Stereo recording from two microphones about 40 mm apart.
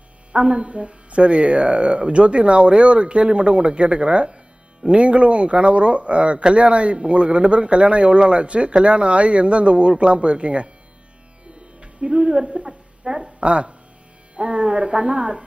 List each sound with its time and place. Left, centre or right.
0.3 s speech: right
11.8 s music: right
13.2 s speech: right